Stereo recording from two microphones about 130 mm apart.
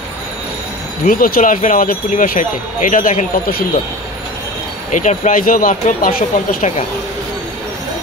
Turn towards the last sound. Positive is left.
turn(degrees=90)